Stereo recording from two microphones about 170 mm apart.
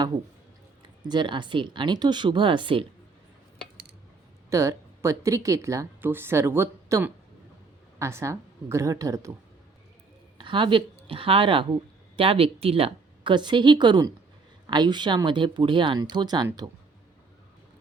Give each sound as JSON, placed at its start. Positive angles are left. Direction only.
{"t": 1.0, "sound": "speech", "side_deg": -25}
{"t": 4.4, "sound": "a woman's voice", "side_deg": -20}
{"t": 10.3, "sound": "speech", "side_deg": -30}